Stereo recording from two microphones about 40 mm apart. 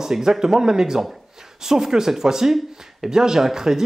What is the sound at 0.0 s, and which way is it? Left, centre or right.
A man's voice, centre.